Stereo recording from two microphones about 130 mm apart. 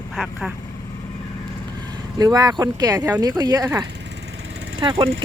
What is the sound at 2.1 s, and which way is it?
Speech, 30° right (ahead or behind).